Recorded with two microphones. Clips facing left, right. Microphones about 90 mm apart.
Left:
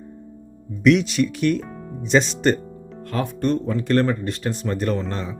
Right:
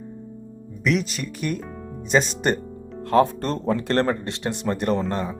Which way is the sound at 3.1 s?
35° right (ahead or behind).